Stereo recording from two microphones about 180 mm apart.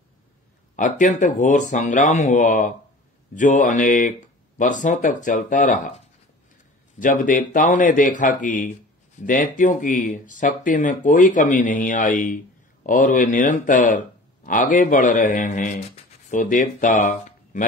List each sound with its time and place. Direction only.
0.7 s speech: 45° left (ahead or behind)
7.0 s speech: 45° left (ahead or behind)